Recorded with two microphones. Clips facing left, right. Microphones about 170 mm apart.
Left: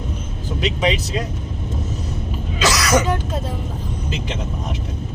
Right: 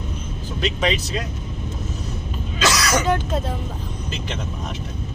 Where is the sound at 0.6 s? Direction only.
15° left (ahead or behind).